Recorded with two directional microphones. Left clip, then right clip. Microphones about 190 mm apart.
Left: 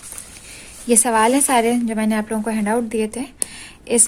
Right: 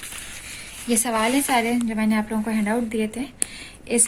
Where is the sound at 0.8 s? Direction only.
50° left (ahead or behind).